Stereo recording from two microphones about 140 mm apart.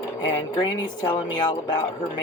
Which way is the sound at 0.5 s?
25° left (ahead or behind).